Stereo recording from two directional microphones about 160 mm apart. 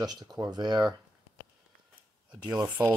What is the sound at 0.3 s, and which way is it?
Speech, 25° right (ahead or behind).